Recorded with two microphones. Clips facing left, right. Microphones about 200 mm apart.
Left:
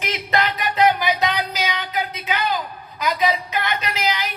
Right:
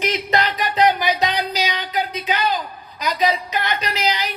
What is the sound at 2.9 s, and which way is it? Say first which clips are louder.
Speech: right 1 dB; 20° right (ahead or behind).